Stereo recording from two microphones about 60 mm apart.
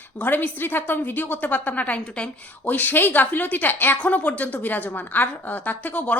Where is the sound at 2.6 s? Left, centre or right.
Left.